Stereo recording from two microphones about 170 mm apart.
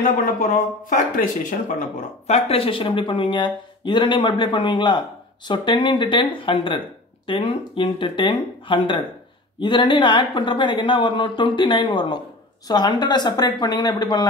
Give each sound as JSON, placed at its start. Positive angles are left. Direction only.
{"t": 0.4, "sound": "speech", "side_deg": 50}